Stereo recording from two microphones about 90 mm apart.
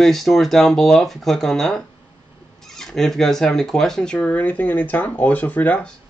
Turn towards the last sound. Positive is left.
turn(degrees=15)  # may be behind; listen again after turning